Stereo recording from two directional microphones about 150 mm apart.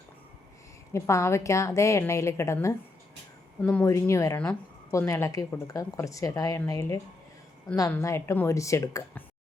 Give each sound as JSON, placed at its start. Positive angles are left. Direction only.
{"t": 0.9, "sound": "a woman's voice", "side_deg": 20}